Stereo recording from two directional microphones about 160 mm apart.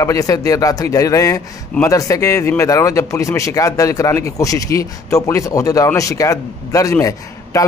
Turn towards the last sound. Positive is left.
turn(degrees=20)  # may be behind; listen again after turning